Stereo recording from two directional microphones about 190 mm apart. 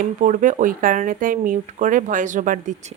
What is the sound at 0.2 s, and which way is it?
Speech, 45° right (ahead or behind).